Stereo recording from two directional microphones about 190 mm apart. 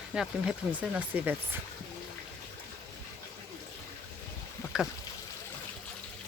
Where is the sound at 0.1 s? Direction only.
5° right (ahead or behind).